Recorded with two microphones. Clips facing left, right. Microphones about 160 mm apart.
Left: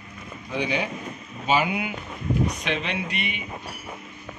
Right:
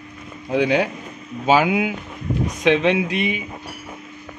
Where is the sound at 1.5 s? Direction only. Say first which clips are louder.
Right 7 dB; 90° right.